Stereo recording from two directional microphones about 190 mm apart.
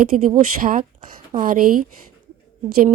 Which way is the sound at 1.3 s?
50° right (ahead or behind).